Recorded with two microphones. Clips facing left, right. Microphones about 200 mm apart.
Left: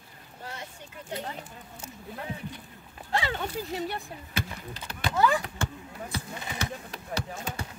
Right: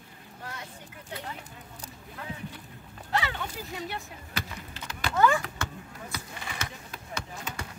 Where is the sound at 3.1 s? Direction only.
30° left (ahead or behind).